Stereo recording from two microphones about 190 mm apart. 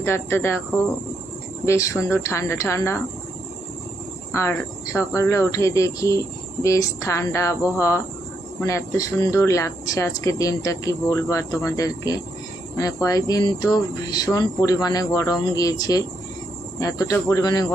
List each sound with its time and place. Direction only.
0.0 s speech: 10° left (ahead or behind)
1.6 s speech: 15° left (ahead or behind)
4.3 s speech: 15° left (ahead or behind)